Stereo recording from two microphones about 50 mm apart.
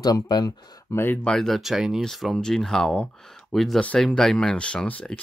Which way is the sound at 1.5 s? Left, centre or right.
Centre.